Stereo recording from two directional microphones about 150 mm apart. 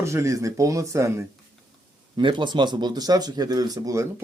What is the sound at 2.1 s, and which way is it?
Speech, 30° right (ahead or behind).